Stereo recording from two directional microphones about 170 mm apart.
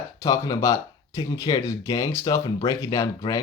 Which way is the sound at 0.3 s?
20° left (ahead or behind).